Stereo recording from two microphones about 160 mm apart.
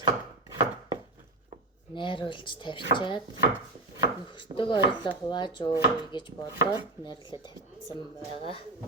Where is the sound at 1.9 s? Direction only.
30° left (ahead or behind).